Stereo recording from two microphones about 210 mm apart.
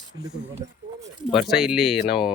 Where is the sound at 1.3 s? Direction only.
Centre (ahead or behind).